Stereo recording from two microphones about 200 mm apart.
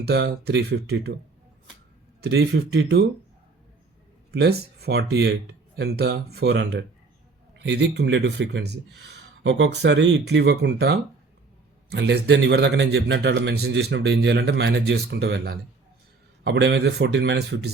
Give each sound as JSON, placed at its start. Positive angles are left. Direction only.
{"t": 0.0, "sound": "a man's voice", "side_deg": -55}
{"t": 2.2, "sound": "a man's voice", "side_deg": -55}
{"t": 4.3, "sound": "a man's voice", "side_deg": -55}